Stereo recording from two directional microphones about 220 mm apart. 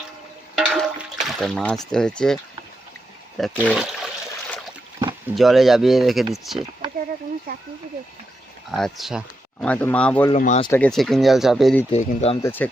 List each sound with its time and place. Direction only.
0.6 s a sound: centre (ahead or behind)
3.3 s speech: centre (ahead or behind)
5.3 s speech: centre (ahead or behind)
7.5 s speech: 45° right (ahead or behind)
8.7 s speech: centre (ahead or behind)
10.3 s speech: 30° left (ahead or behind)
10.8 s speech: 5° left (ahead or behind)
11.9 s speech: 25° left (ahead or behind)
12.4 s speech: 10° left (ahead or behind)